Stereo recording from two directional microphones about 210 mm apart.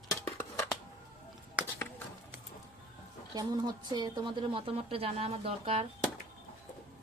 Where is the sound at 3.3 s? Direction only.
20° right (ahead or behind).